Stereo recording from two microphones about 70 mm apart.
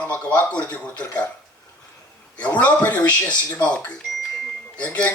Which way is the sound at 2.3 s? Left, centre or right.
Left.